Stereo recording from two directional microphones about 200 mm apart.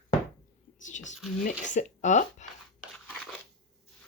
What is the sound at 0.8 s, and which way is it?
Whispering, 40° left (ahead or behind).